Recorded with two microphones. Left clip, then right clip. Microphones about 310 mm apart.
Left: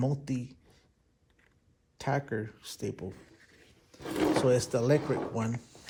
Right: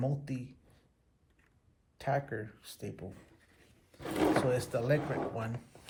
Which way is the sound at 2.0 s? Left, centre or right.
Left.